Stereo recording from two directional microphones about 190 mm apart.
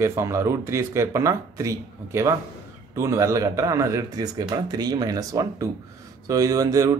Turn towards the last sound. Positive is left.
turn(degrees=-20)  # may be behind; listen again after turning